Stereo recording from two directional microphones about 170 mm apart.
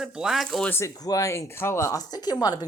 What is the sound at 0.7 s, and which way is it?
Speech, 15° left (ahead or behind).